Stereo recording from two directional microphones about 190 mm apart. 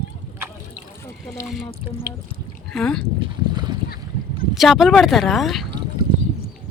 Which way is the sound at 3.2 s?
25° right (ahead or behind).